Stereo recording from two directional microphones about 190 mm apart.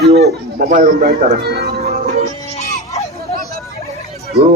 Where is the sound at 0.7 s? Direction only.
45° right (ahead or behind).